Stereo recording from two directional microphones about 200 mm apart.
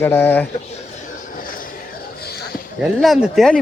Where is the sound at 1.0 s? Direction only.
45° left (ahead or behind).